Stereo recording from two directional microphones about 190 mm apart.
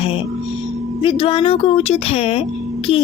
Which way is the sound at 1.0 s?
30° left (ahead or behind).